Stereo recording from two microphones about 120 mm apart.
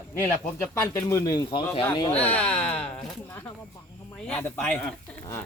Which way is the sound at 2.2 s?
10° left (ahead or behind).